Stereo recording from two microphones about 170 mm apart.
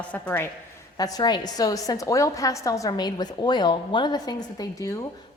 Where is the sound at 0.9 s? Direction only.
25° left (ahead or behind).